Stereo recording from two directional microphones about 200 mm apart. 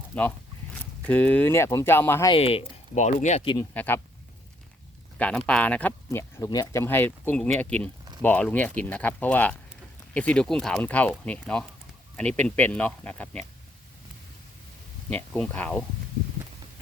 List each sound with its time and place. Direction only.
0.1 s speech: 10° left (ahead or behind)
2.3 s speech: 30° left (ahead or behind)
3.8 s speech: 10° left (ahead or behind)
5.1 s speech: 5° left (ahead or behind)
15.1 s speech: 5° left (ahead or behind)